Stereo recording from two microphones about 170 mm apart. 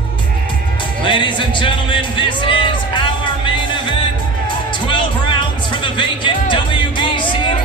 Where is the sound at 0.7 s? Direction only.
30° left (ahead or behind).